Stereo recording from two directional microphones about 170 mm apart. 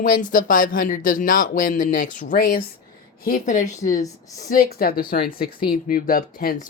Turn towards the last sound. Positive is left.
turn(degrees=60)  # may be behind; listen again after turning